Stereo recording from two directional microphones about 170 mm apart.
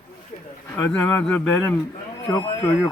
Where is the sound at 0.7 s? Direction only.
15° left (ahead or behind).